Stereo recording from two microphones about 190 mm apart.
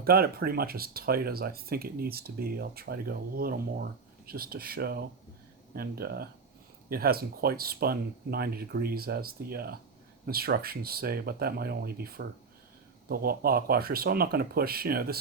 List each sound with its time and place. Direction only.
0.0 s speech: 50° right (ahead or behind)